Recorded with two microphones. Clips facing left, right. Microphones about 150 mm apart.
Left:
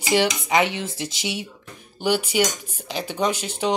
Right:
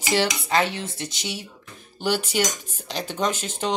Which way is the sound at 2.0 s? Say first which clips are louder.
Left 3 dB; 10° left (ahead or behind).